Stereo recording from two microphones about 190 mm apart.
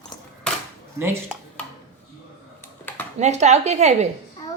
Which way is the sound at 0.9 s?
10° right (ahead or behind).